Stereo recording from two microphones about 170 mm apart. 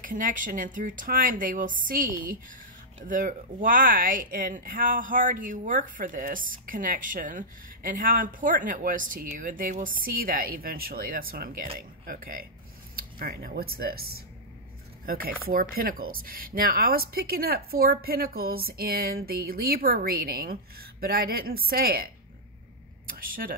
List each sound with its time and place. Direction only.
0.0 s speech: 50° right (ahead or behind)